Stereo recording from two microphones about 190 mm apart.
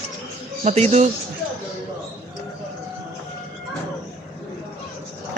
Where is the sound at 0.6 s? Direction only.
35° right (ahead or behind).